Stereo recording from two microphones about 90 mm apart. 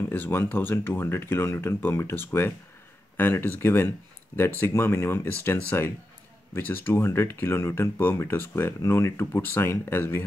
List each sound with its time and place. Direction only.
0.1 s speech: 25° left (ahead or behind)